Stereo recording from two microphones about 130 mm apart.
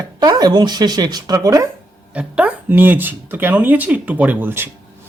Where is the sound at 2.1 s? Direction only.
10° right (ahead or behind).